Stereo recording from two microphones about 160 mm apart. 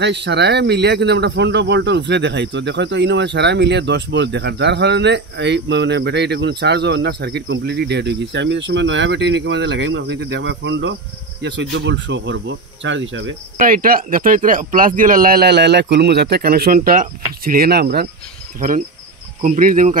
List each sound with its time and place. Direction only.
0.0 s speech: 90° right
13.6 s speech: 60° right (ahead or behind); by 18.0 s 80° right
19.4 s speech: 50° right (ahead or behind)